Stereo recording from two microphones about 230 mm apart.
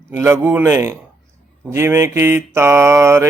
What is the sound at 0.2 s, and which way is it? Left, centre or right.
Mantra, centre.